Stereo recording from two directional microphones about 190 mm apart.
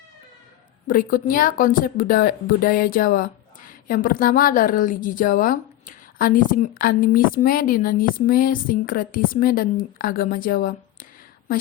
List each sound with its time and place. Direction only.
0.9 s speech: 45° left (ahead or behind)